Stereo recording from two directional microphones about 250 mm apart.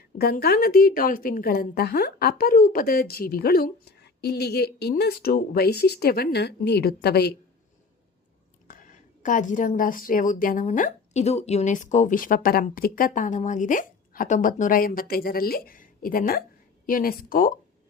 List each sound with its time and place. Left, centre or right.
0.2 s a woman's voice: left
8.6 s a woman's voice: left